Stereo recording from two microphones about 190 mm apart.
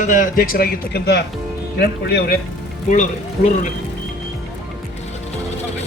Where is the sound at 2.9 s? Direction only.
40° left (ahead or behind).